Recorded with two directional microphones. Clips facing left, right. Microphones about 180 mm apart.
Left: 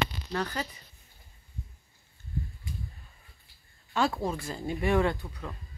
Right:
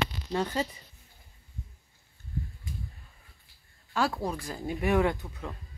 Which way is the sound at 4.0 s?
10° right (ahead or behind).